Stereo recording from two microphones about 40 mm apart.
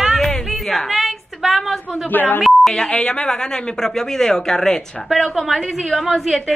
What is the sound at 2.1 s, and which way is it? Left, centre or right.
Speech, left.